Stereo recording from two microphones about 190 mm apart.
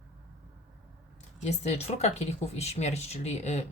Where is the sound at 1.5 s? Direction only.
35° left (ahead or behind).